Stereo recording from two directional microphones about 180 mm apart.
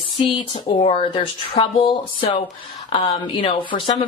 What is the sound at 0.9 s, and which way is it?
Speech, 25° left (ahead or behind).